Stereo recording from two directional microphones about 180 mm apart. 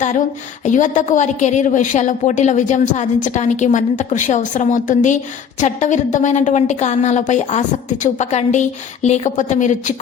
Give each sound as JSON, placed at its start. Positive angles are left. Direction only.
{"t": 0.6, "sound": "a woman's voice", "side_deg": 45}